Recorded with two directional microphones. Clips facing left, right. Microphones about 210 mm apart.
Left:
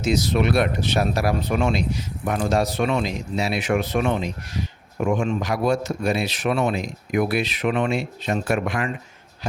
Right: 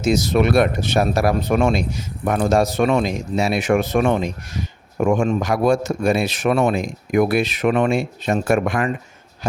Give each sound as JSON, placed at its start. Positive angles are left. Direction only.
{"t": 0.0, "sound": "speech", "side_deg": -45}